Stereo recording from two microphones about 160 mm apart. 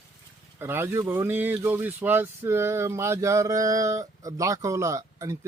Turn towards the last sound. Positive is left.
turn(degrees=-20)  # may be behind; listen again after turning